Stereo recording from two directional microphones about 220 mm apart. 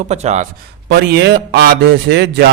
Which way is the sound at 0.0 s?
30° right (ahead or behind).